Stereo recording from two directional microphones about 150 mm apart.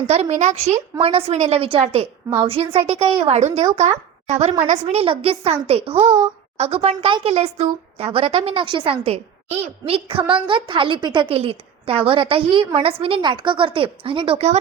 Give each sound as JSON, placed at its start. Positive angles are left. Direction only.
{"t": 0.1, "sound": "a woman's voice", "side_deg": -50}